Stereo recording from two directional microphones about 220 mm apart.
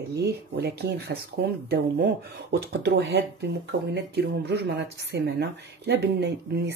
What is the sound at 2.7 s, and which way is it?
Speech, 50° right (ahead or behind).